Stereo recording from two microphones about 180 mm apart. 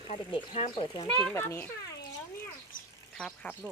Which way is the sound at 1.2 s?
10° left (ahead or behind).